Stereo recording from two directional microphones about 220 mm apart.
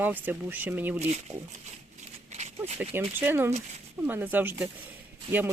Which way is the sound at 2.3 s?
30° right (ahead or behind).